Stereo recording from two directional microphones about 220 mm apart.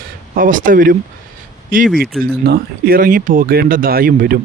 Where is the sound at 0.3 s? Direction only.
35° right (ahead or behind).